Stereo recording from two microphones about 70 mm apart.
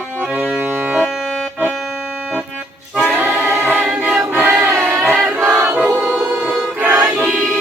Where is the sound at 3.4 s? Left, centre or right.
Right.